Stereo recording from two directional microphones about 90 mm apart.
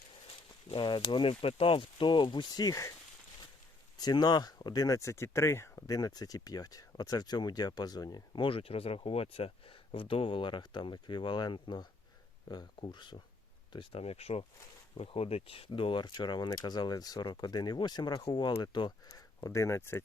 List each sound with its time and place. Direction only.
0.3 s speech: 65° left (ahead or behind); by 2.9 s 40° left (ahead or behind)
3.9 s speech: 50° left (ahead or behind); by 5.8 s 30° left (ahead or behind)
5.9 s speech: 45° left (ahead or behind)
8.4 s speech: 90° left; by 13.2 s 60° left (ahead or behind)
13.7 s speech: 90° left; by 18.9 s 55° left (ahead or behind)
19.0 s speech: 40° left (ahead or behind)